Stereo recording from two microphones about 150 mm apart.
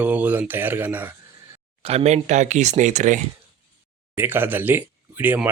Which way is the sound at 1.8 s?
45° right (ahead or behind).